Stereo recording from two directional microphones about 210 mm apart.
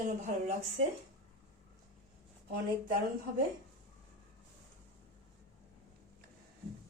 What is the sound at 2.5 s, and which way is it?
Speech, 45° right (ahead or behind).